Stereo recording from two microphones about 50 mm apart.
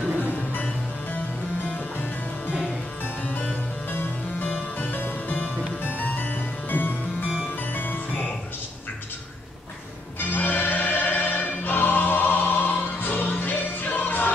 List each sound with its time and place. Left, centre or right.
0.2 s music: left
3.3 s harpsichord: left
3.9 s music: left
10.1 s music: left